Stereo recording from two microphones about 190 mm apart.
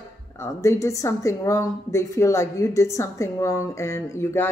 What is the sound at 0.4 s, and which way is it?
A woman's voice, 15° left (ahead or behind).